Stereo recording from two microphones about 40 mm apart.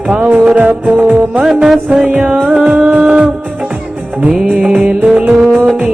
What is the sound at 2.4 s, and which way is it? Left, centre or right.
Music, centre.